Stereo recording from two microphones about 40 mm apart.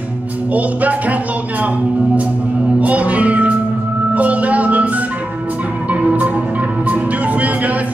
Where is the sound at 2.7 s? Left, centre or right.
Right.